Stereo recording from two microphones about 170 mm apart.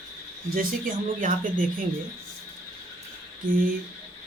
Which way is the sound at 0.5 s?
55° right (ahead or behind).